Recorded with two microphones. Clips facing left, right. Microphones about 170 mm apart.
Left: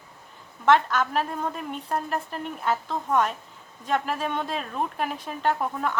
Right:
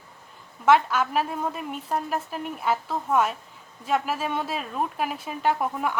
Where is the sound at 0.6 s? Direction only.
5° right (ahead or behind).